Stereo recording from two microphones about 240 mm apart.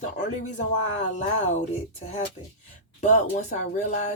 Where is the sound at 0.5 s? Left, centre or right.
Left.